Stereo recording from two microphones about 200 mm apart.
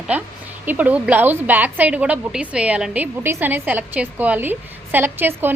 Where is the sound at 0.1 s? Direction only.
5° right (ahead or behind).